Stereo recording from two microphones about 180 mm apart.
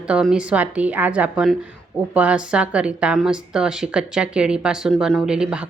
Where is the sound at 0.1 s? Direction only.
5° right (ahead or behind).